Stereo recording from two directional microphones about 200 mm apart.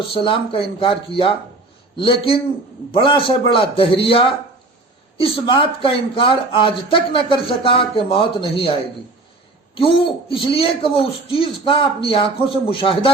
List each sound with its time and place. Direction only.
0.1 s speech: 25° left (ahead or behind)
9.7 s speech: 25° left (ahead or behind)